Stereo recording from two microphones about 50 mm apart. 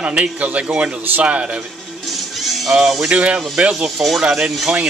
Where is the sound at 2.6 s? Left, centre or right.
Centre.